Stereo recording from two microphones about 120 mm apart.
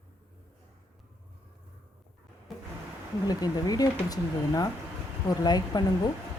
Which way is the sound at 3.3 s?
30° left (ahead or behind).